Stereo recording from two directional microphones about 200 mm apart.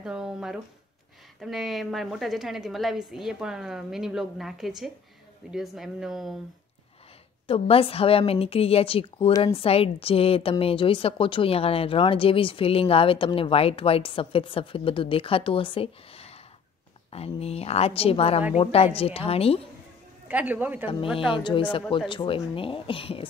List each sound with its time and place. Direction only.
0.0 s a woman's voice: 5° right (ahead or behind)
7.4 s a woman's voice: 30° left (ahead or behind)
20.2 s speech: 10° right (ahead or behind)
20.8 s a woman's voice: 25° left (ahead or behind)